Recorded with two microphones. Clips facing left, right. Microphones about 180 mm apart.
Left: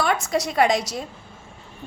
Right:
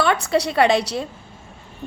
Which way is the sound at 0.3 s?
30° right (ahead or behind).